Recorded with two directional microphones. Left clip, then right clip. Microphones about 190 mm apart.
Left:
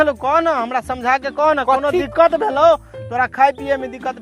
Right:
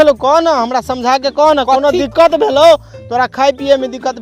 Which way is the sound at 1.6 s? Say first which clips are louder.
Right 5 dB; 40° right (ahead or behind).